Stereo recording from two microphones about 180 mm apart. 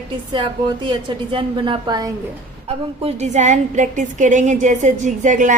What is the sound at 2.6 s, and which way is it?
A woman's voice, 35° right (ahead or behind).